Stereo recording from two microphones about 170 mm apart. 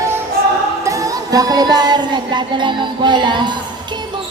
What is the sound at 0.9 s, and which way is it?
Music, 20° right (ahead or behind).